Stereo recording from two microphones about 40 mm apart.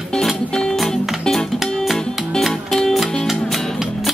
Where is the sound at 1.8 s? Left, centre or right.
Centre.